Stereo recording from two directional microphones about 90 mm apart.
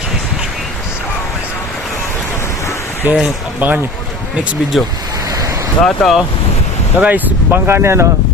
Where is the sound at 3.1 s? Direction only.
25° right (ahead or behind).